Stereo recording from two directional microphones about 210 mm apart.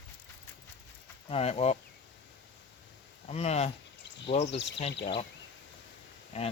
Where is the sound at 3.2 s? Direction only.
30° left (ahead or behind).